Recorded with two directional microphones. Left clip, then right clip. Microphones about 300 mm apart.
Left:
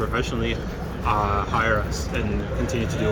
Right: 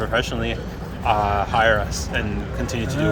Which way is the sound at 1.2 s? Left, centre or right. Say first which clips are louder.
Right 4 dB; right.